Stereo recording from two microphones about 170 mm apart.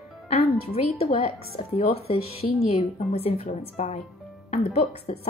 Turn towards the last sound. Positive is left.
turn(degrees=40)  # may be behind; listen again after turning